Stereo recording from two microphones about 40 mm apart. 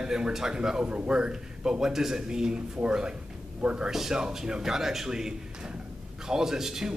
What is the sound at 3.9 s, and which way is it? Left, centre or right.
Speech, centre.